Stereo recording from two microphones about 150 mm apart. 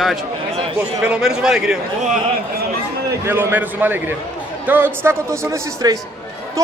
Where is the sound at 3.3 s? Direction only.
15° right (ahead or behind).